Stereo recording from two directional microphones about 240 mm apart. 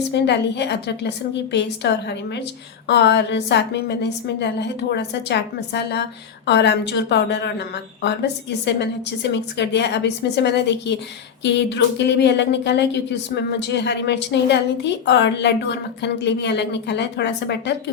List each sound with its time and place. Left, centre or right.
0.1 s a woman's voice: left